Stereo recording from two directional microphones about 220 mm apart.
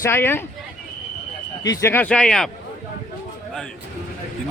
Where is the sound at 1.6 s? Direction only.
10° left (ahead or behind).